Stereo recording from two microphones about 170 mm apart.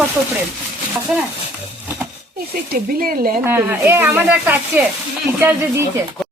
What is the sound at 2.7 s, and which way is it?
Speech, 60° right (ahead or behind).